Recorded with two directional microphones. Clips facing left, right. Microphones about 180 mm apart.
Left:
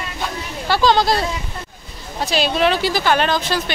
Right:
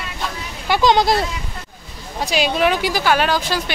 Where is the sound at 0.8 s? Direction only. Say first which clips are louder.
Right 1 dB; 20° right (ahead or behind).